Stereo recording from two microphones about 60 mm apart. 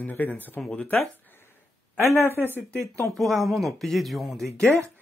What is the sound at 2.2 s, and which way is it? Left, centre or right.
Speech, left.